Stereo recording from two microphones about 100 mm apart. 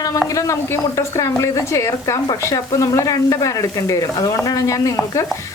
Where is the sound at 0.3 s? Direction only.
30° left (ahead or behind).